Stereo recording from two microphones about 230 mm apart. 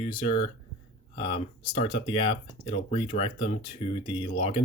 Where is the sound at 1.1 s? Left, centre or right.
Left.